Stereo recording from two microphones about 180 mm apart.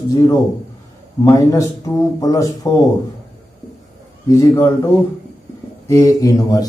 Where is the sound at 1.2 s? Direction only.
15° left (ahead or behind).